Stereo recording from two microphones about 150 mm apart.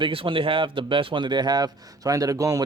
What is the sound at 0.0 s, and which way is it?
Speech, 35° right (ahead or behind).